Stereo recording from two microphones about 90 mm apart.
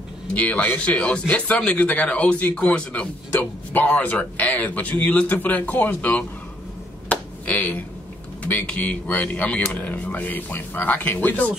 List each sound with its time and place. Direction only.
0.3 s speech: 15° left (ahead or behind)
7.1 s finger snapping: 15° left (ahead or behind)
8.5 s speech: 15° left (ahead or behind)